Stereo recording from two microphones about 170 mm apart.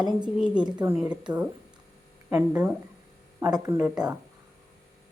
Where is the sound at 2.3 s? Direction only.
10° right (ahead or behind).